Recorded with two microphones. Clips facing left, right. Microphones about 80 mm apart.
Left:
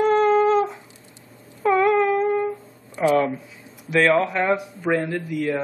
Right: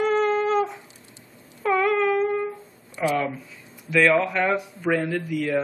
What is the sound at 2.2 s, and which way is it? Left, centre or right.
Music, centre.